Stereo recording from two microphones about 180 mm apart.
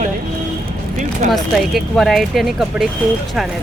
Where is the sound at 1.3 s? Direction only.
Centre (ahead or behind).